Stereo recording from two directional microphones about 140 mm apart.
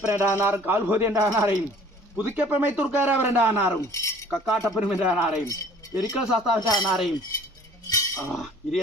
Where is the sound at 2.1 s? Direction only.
10° right (ahead or behind).